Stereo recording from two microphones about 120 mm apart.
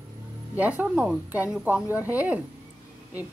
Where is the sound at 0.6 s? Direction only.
10° right (ahead or behind).